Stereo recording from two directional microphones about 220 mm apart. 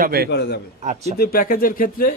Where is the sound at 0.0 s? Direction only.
45° right (ahead or behind).